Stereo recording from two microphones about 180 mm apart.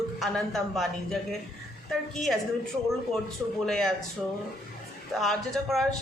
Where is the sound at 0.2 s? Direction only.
Centre (ahead or behind).